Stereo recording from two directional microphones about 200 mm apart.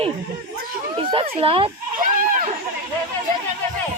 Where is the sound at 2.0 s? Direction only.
40° right (ahead or behind).